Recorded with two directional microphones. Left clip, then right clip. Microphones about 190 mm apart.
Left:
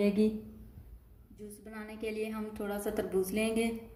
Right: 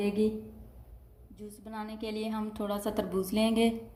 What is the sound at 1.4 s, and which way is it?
A woman's voice, 45° right (ahead or behind).